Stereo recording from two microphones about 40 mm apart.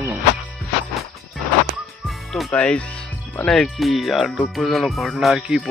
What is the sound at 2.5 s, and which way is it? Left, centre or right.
Speech, left.